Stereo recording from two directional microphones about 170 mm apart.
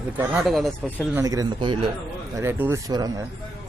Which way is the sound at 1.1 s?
20° right (ahead or behind).